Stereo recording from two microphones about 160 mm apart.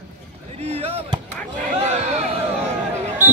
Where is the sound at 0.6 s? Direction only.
40° right (ahead or behind).